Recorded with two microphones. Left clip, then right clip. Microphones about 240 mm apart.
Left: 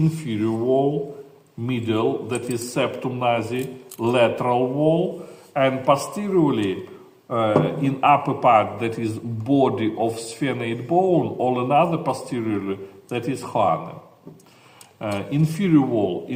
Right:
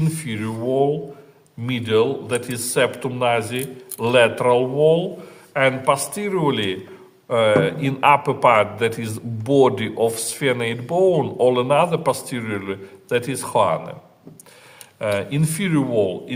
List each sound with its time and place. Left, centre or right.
0.2 s a man's voice: right
15.0 s a man's voice: right